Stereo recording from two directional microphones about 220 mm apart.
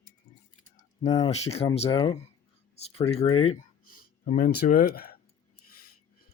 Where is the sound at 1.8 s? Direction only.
20° left (ahead or behind).